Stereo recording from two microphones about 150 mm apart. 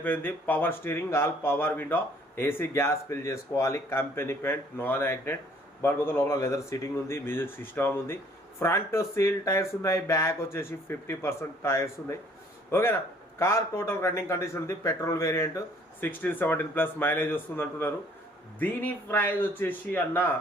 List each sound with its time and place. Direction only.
0.0 s speech: 15° left (ahead or behind)